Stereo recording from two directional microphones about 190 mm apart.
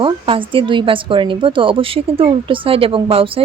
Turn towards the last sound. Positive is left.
turn(degrees=-30)  # may be behind; listen again after turning